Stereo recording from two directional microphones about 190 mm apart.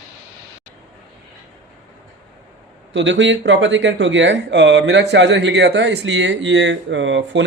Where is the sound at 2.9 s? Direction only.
80° right.